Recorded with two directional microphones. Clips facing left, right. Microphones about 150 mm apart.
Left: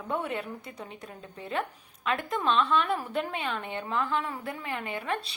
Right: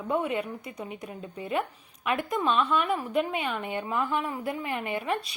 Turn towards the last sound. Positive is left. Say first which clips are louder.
# right 3 dB
turn(degrees=-20)  # may be behind; listen again after turning